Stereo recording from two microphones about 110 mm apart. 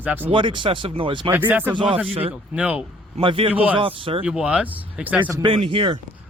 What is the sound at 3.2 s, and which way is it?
Speech, 55° right (ahead or behind).